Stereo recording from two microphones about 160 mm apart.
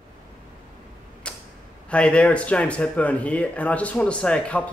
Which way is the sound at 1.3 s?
5° left (ahead or behind).